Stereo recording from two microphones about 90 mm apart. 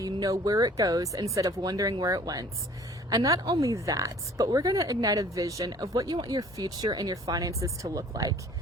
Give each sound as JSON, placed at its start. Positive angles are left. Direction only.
{"t": 0.0, "sound": "a woman's voice", "side_deg": -40}